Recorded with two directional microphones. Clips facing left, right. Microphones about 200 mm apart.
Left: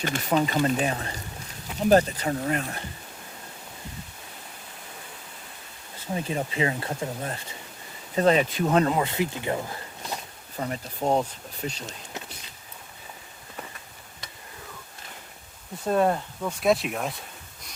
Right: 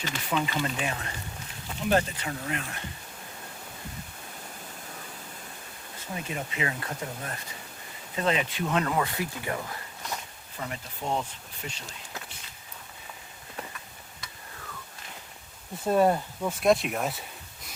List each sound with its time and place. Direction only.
0.0 s speech: 45° left (ahead or behind)
6.1 s speech: 30° left (ahead or behind)
8.1 s speech: 40° left (ahead or behind)
8.9 s speech: 25° left (ahead or behind)
10.6 s speech: 40° left (ahead or behind)
15.9 s speech: 5° right (ahead or behind)